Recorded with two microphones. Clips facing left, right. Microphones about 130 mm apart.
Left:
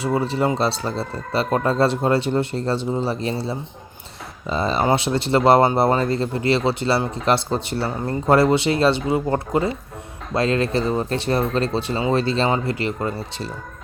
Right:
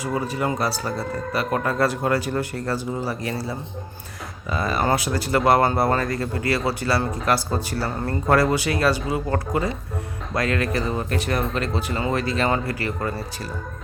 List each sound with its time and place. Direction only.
0.0 s speech: 30° left (ahead or behind)